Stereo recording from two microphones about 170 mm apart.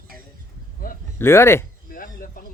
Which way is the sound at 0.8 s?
60° left (ahead or behind).